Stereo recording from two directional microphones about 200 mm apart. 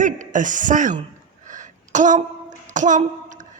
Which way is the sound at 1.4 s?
40° right (ahead or behind).